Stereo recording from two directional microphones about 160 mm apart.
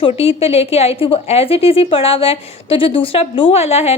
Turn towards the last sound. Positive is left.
turn(degrees=40)  # may be behind; listen again after turning